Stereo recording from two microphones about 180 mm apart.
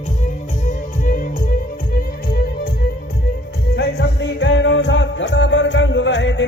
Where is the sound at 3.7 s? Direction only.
75° left (ahead or behind).